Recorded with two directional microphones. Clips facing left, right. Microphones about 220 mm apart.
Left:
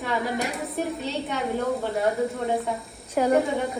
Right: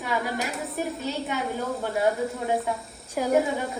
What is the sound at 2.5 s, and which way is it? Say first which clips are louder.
A woman's voice: even; centre (ahead or behind).